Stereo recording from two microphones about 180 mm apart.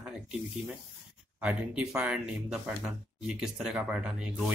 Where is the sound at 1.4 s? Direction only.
5° right (ahead or behind).